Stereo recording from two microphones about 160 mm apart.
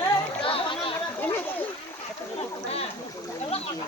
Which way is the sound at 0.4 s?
35° left (ahead or behind).